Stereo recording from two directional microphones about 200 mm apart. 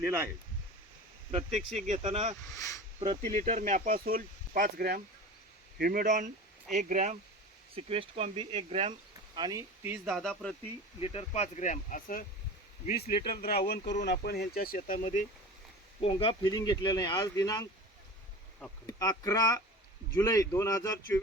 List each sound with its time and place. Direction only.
0.0 s speech: 10° right (ahead or behind)
1.5 s speech: 35° right (ahead or behind)
2.6 s speech: 15° left (ahead or behind)
3.0 s speech: 35° right (ahead or behind)
9.3 s speech: 20° right (ahead or behind); by 10.5 s centre (ahead or behind)
11.0 s speech: 30° left (ahead or behind); by 14.8 s 50° left (ahead or behind)
14.8 s speech: 35° left (ahead or behind)
16.0 s speech: 25° left (ahead or behind)
18.9 s speech: 15° left (ahead or behind)